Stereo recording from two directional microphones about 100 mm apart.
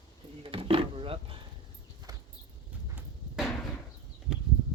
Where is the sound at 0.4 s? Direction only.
70° right (ahead or behind).